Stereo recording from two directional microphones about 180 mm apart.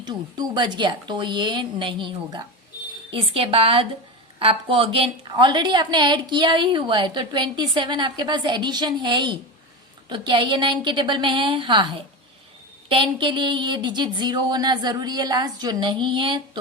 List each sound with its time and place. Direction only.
0.0 s a woman's voice: 25° right (ahead or behind)